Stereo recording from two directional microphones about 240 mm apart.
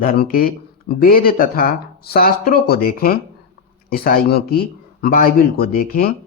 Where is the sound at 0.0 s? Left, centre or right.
Left.